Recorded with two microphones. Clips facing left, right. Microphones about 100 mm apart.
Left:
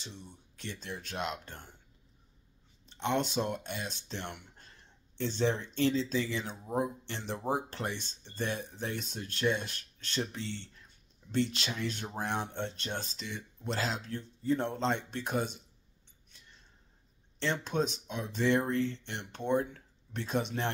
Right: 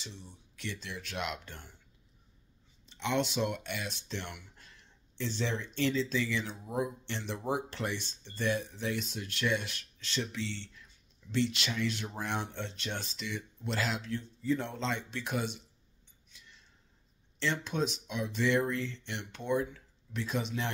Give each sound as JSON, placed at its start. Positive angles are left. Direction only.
{"t": 0.6, "sound": "speech", "side_deg": 45}
{"t": 2.9, "sound": "speech", "side_deg": 45}
{"t": 17.4, "sound": "speech", "side_deg": 40}